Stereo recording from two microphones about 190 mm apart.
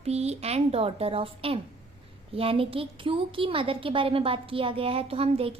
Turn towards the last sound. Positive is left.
turn(degrees=-30)  # may be behind; listen again after turning